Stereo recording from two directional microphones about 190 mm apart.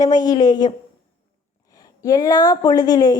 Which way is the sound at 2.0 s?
20° left (ahead or behind).